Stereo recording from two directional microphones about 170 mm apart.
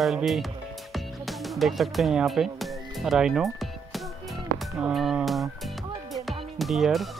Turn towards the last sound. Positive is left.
turn(degrees=0)  # may be behind; listen again after turning